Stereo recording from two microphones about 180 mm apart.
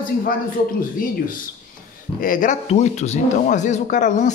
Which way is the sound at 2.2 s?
50° left (ahead or behind).